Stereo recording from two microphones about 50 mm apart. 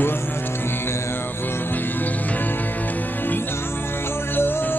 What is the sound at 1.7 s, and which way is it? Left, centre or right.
Music, left.